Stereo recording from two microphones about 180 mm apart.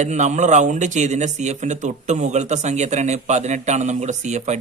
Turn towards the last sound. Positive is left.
turn(degrees=-40)  # may be behind; listen again after turning